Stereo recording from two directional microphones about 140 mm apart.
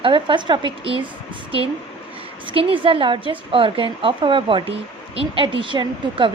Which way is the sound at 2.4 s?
40° right (ahead or behind).